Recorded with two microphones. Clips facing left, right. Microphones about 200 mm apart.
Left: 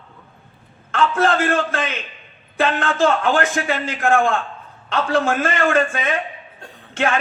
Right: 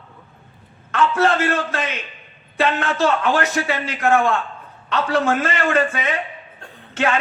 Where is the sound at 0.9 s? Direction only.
50° left (ahead or behind).